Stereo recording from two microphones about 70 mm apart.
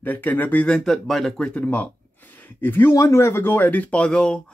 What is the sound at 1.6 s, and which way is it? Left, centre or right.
Speech, left.